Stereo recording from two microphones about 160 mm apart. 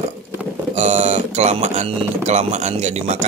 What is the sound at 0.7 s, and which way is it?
Speech, 45° right (ahead or behind).